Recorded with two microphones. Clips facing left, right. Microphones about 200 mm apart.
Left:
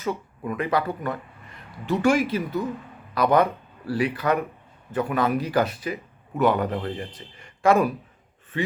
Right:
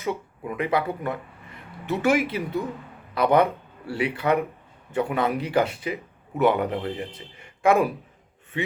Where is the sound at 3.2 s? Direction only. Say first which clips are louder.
Even; 25° right (ahead or behind).